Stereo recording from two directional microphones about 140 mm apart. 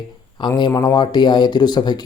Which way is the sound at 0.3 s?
30° left (ahead or behind).